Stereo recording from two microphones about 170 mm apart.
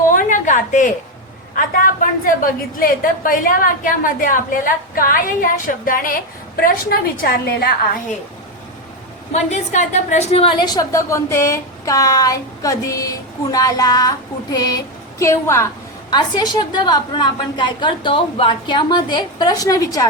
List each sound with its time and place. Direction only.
0.1 s a sound: 50° left (ahead or behind)
1.5 s a woman's voice: 55° left (ahead or behind)
9.3 s a woman's voice: 45° left (ahead or behind); by 20.1 s 20° left (ahead or behind)